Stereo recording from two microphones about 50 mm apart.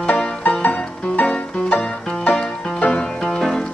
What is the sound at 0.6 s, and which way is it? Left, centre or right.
Music, left.